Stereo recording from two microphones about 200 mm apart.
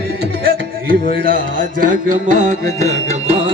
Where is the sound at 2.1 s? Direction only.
40° right (ahead or behind).